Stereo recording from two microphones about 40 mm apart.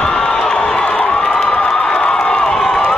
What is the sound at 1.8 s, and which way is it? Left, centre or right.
Crowd, left.